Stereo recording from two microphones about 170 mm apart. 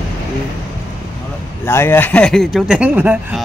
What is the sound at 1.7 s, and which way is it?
Speech, 15° left (ahead or behind).